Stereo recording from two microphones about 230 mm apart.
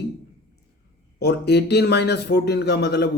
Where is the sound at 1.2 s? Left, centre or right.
Left.